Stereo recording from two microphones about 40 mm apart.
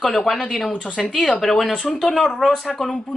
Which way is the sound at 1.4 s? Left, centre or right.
Centre.